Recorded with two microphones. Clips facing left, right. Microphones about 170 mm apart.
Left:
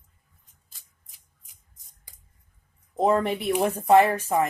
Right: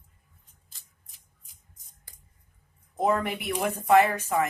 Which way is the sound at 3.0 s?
30° left (ahead or behind).